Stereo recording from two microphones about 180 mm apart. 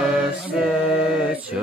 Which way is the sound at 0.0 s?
5° right (ahead or behind).